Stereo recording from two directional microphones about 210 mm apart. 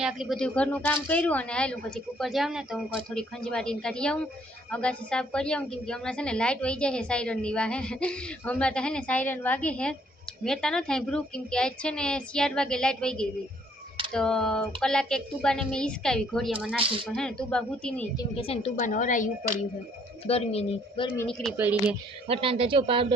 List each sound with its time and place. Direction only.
0.0 s a woman's voice: centre (ahead or behind)
18.2 s a woman's voice: 25° left (ahead or behind)
21.2 s a woman's voice: 5° left (ahead or behind)
22.3 s speech: 25° right (ahead or behind)